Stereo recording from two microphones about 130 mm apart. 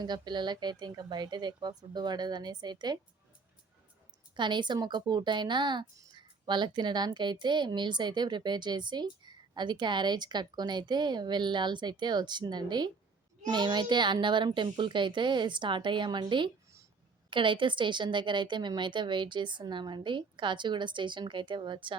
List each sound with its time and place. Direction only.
0.0 s a woman's voice: 35° right (ahead or behind)
4.4 s a woman's voice: 35° right (ahead or behind)